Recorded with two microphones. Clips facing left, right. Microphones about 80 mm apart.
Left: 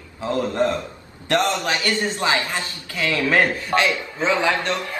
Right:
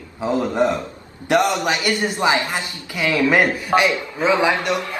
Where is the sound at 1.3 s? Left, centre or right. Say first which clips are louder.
Right 3 dB; centre.